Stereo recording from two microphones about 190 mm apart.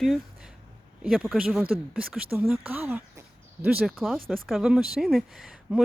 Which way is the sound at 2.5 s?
5° right (ahead or behind).